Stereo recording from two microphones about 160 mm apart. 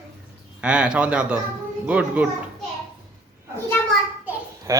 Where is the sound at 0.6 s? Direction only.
5° right (ahead or behind).